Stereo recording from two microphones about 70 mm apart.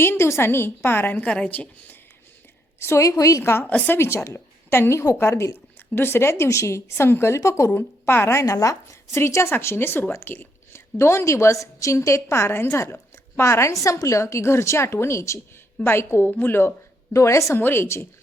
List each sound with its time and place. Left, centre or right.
0.0 s a woman's voice: left
1.2 s a woman's voice: centre
2.7 s a woman's voice: left
3.6 s a woman's voice: left
3.9 s a woman's voice: left
7.7 s a woman's voice: left
8.5 s a woman's voice: left
17.2 s a woman's voice: left
17.6 s a woman's voice: left